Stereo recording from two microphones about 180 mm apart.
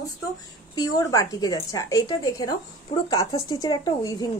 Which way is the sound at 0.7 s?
20° left (ahead or behind).